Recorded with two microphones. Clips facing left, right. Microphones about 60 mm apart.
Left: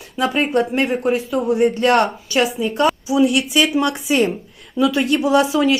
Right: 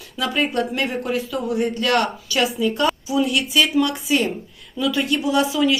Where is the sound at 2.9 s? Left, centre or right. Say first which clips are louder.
Left 3 dB; centre.